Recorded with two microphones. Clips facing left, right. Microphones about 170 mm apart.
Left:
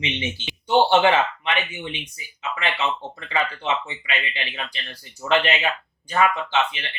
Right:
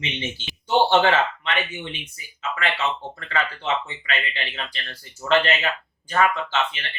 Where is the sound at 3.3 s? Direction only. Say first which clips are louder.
Left 1 dB; 15° left (ahead or behind).